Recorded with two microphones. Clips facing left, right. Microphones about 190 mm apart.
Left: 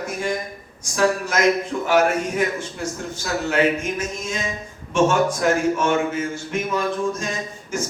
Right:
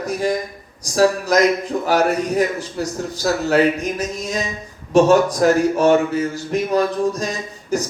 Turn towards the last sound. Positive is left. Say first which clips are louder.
# right 4 dB
turn(degrees=-35)  # may be behind; listen again after turning